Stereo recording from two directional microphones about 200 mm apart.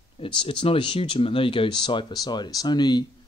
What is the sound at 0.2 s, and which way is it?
Speech, 25° left (ahead or behind).